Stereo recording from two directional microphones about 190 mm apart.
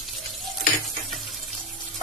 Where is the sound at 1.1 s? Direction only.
Centre (ahead or behind).